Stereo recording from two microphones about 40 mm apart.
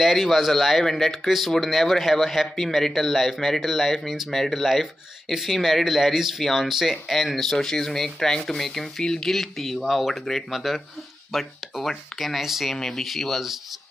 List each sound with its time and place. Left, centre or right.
0.0 s speech: centre
9.0 s speech: centre
9.3 s speech: centre
12.4 s speech: centre
12.7 s speech: centre
13.0 s speech: centre